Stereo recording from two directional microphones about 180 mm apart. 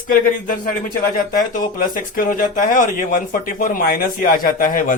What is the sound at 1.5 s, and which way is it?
Speech, 50° left (ahead or behind).